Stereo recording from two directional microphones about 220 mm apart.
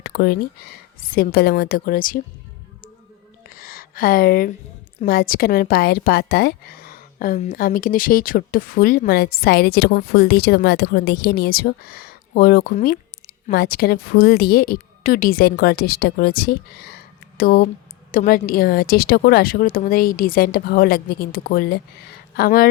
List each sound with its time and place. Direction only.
0.0 s a woman's voice: 45° left (ahead or behind)
3.5 s a sound: 40° left (ahead or behind)
5.0 s a woman's voice: 40° left (ahead or behind)